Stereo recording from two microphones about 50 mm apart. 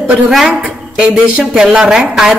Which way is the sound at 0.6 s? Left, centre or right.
Centre.